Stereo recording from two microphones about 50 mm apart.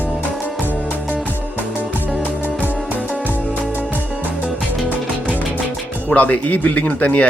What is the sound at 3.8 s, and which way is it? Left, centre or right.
Music, right.